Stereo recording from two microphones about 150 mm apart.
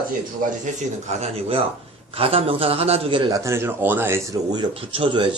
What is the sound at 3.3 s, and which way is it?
A man's voice, 20° right (ahead or behind).